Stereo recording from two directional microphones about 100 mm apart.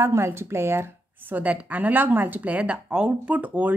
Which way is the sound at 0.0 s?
25° right (ahead or behind).